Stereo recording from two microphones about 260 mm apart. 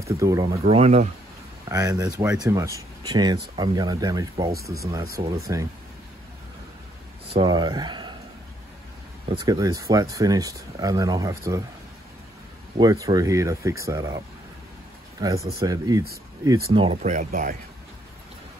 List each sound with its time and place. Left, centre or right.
0.2 s speech: centre
1.7 s speech: centre
7.3 s speech: centre
9.4 s speech: centre
12.7 s speech: centre; by 17.6 s right